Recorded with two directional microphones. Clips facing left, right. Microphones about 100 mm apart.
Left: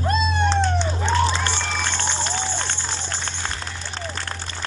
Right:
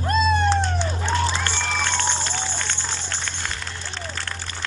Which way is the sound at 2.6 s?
25° left (ahead or behind).